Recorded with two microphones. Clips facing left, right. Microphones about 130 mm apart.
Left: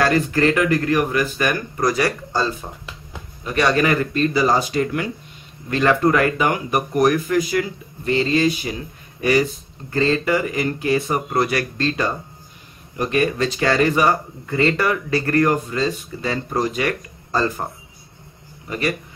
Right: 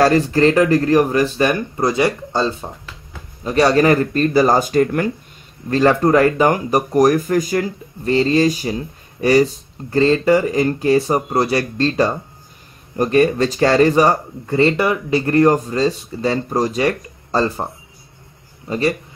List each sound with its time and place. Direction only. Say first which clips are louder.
0.0 s speech: right 4 dB; 35° right (ahead or behind)
3.4 s speech: right 5 dB; 35° right (ahead or behind)
5.7 s speech: right 3 dB; 35° right (ahead or behind)
15.5 s speech: right 4 dB; 35° right (ahead or behind)
18.7 s speech: right 5 dB; 30° right (ahead or behind)